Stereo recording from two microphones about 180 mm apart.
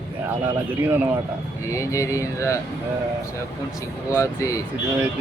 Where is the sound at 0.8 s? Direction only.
10° right (ahead or behind).